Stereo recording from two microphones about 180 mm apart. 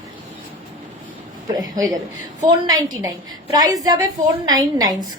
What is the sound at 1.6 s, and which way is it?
A woman's voice, 20° right (ahead or behind).